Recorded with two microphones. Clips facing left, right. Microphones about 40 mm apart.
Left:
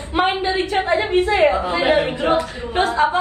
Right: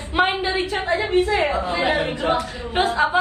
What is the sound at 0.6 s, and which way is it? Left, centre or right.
A woman's voice, left.